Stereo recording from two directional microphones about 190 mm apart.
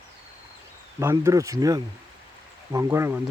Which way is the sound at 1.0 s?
15° right (ahead or behind).